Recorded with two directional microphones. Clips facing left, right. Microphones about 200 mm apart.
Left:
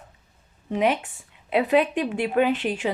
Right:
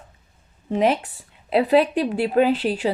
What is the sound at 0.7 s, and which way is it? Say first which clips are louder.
A woman's voice: right 3 dB; 35° right (ahead or behind).